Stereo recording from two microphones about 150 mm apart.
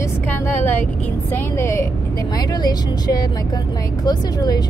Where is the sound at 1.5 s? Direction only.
20° left (ahead or behind).